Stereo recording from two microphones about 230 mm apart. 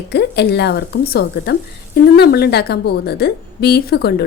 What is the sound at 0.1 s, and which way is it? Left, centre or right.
A woman's voice, left.